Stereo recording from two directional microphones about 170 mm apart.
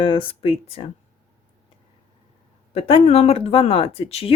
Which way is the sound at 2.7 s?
35° left (ahead or behind).